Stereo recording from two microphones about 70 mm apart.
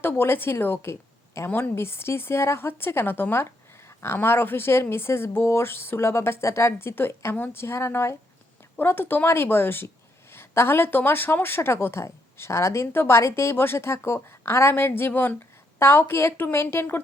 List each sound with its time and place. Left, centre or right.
0.0 s speech: left